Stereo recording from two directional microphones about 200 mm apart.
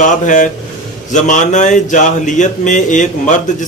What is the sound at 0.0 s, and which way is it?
Speech, 40° left (ahead or behind).